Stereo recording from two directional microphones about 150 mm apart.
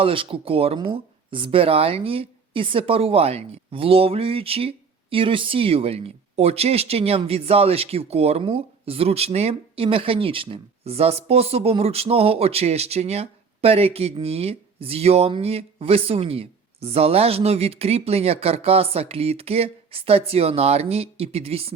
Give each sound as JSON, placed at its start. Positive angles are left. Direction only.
{"t": 0.0, "sound": "speech", "side_deg": -35}